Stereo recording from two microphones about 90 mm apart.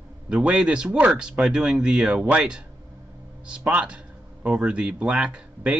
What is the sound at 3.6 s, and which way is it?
Speech, 15° right (ahead or behind).